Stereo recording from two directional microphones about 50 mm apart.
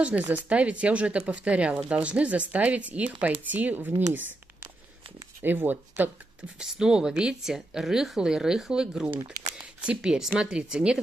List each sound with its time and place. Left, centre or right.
0.2 s speech: right
0.5 s speech: right
5.4 s speech: right
6.6 s speech: centre